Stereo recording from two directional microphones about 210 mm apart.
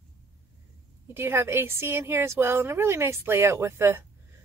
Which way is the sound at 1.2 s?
10° right (ahead or behind).